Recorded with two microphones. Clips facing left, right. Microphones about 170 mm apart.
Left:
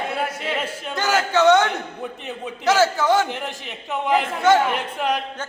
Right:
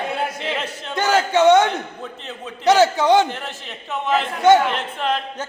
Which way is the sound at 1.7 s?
15° left (ahead or behind).